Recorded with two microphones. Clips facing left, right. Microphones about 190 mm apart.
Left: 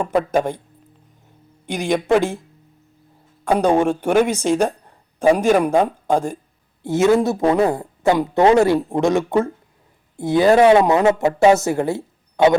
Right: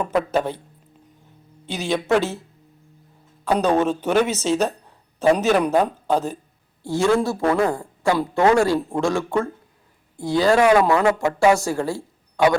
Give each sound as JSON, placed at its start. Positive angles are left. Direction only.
{"t": 0.3, "sound": "speech", "side_deg": 15}
{"t": 1.6, "sound": "speech", "side_deg": 15}
{"t": 3.5, "sound": "speech", "side_deg": 15}